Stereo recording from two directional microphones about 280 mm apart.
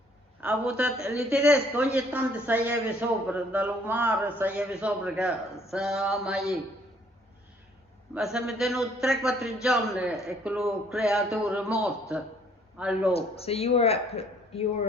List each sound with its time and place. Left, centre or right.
0.4 s a man's voice: centre
8.1 s a man's voice: centre
13.1 s speech: left